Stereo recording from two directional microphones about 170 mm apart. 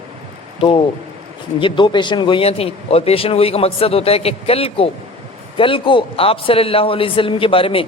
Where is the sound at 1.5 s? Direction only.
30° left (ahead or behind).